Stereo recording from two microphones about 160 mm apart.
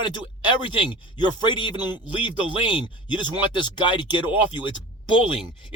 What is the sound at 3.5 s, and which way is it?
Speech, 30° left (ahead or behind).